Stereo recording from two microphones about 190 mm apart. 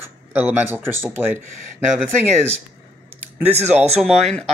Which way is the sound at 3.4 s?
35° right (ahead or behind).